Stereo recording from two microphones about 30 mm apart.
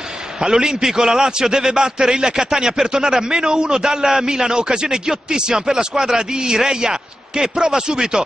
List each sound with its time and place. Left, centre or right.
0.4 s a man's voice: right